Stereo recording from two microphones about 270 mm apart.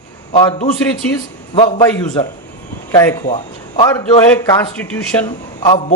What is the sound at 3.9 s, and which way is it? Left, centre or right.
A man's voice, centre.